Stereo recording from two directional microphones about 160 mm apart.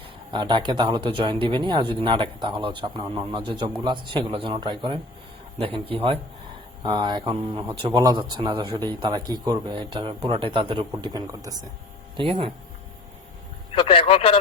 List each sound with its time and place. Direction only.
0.3 s a man's voice: 30° right (ahead or behind)
12.1 s a man's voice: 35° right (ahead or behind)
13.7 s speech: 30° left (ahead or behind)